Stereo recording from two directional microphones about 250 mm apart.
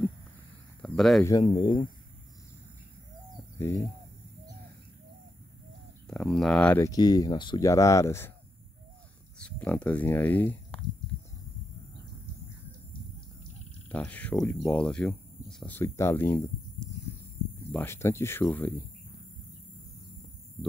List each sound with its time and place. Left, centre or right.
0.8 s speech: centre
1.2 s speech: centre
3.5 s speech: centre
6.0 s speech: centre
9.4 s speech: centre
13.8 s speech: centre
17.7 s speech: centre